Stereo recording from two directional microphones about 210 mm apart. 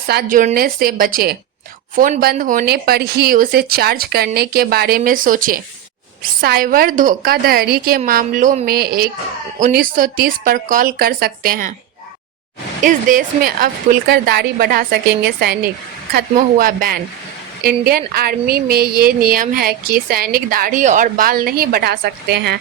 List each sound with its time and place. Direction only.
0.1 s a woman's voice: 45° right (ahead or behind)
12.8 s a woman's voice: 40° right (ahead or behind)